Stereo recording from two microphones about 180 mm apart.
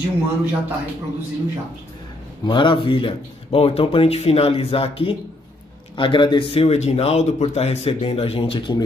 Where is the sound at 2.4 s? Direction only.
25° left (ahead or behind).